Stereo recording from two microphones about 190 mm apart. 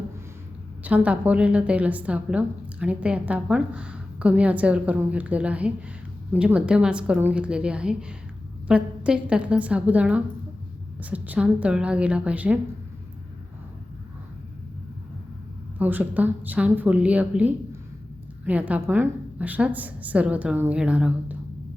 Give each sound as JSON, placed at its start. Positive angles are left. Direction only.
{"t": 0.9, "sound": "a woman's voice", "side_deg": -10}
{"t": 15.8, "sound": "a woman's voice", "side_deg": -10}